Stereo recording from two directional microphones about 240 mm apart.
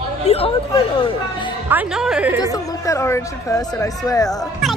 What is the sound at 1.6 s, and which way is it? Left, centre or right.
Speech, centre.